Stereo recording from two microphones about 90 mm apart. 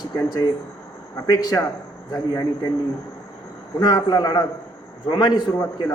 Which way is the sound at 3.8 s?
50° left (ahead or behind).